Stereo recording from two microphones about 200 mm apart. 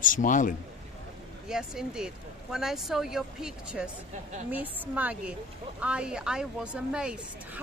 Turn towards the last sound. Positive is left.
turn(degrees=-5)  # may be behind; listen again after turning